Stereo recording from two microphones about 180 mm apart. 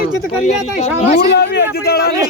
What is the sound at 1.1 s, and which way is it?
Speech, 65° left (ahead or behind).